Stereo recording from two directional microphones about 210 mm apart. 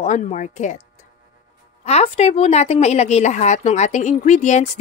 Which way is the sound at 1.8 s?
30° left (ahead or behind).